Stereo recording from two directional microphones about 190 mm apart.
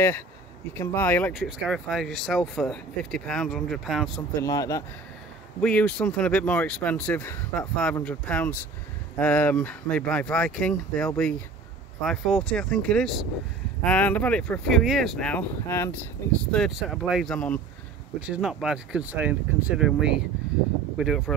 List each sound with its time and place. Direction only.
0.7 s speech: 10° left (ahead or behind)
1.3 s speech: centre (ahead or behind)
4.4 s speech: 15° left (ahead or behind)
5.6 s speech: 5° left (ahead or behind)
16.5 s speech: centre (ahead or behind)